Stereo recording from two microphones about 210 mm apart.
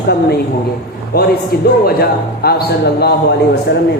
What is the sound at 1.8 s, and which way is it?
Speech, 50° left (ahead or behind).